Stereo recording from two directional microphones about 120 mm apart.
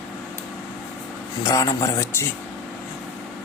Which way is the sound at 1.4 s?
30° left (ahead or behind).